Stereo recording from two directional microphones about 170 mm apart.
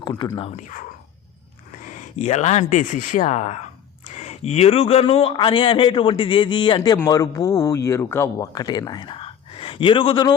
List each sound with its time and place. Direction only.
0.0 s a man's voice: 20° left (ahead or behind)
0.5 s a man's voice: 50° left (ahead or behind); by 10.3 s 30° left (ahead or behind)